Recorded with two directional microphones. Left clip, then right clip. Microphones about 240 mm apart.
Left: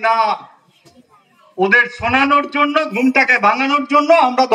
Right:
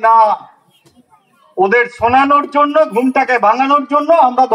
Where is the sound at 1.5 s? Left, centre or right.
Right.